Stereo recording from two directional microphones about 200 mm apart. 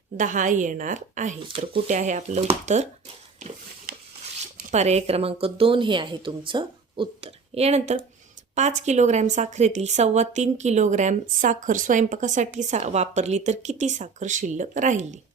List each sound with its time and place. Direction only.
0.2 s a woman's voice: 40° right (ahead or behind)
3.9 s rub: 50° right (ahead or behind)
4.5 s a woman's voice: 35° right (ahead or behind)